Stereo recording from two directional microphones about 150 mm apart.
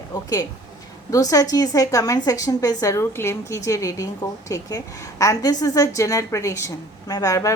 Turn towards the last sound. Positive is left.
turn(degrees=20)  # may be behind; listen again after turning